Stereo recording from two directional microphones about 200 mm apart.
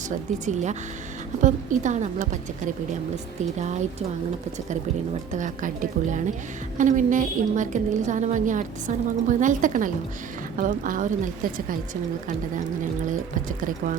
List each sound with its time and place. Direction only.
0.1 s a woman's voice: 35° right (ahead or behind)
5.3 s a woman's voice: 40° right (ahead or behind)